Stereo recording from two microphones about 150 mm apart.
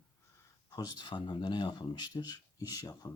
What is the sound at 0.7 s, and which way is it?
Speech, 30° left (ahead or behind).